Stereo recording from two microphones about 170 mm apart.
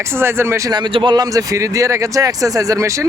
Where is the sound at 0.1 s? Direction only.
15° right (ahead or behind).